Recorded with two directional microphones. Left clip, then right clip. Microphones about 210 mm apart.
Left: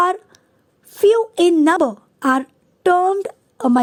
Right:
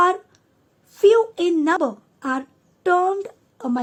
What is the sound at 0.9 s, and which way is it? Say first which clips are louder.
A woman's voice: left 1 dB; 35° left (ahead or behind).